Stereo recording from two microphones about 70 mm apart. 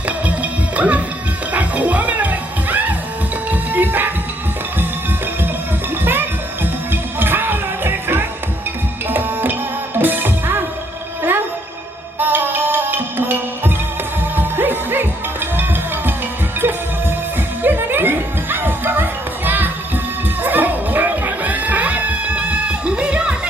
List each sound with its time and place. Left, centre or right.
0.3 s music: right
6.1 s music: right
17.6 s music: right